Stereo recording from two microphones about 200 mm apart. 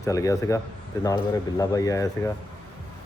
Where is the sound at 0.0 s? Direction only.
15° left (ahead or behind).